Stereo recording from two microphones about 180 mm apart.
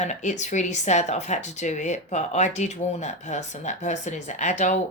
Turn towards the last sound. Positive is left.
turn(degrees=40)  # may be behind; listen again after turning